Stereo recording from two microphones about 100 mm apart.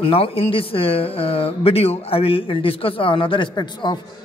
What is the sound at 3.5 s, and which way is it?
Speech, 45° left (ahead or behind).